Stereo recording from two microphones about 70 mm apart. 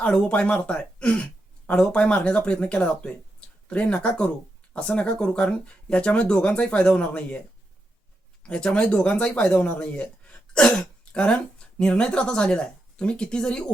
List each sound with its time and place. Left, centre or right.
0.0 s speech: centre
8.4 s speech: centre